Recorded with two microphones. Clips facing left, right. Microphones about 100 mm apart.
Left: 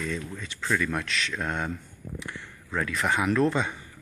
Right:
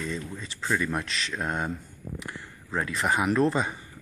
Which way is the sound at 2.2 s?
5° right (ahead or behind).